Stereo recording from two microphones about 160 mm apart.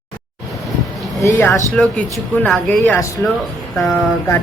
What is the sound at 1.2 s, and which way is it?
Speech, 15° left (ahead or behind).